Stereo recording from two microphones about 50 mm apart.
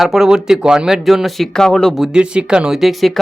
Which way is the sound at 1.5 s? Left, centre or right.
Centre.